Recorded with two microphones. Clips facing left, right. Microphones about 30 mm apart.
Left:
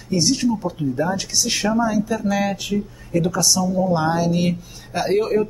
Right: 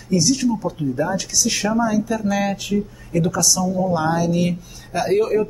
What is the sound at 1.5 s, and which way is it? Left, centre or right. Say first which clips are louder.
Speech: left 1 dB; centre.